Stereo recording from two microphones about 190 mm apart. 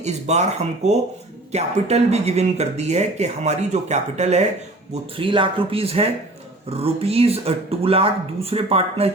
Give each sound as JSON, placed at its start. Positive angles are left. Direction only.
{"t": 0.0, "sound": "speech", "side_deg": -35}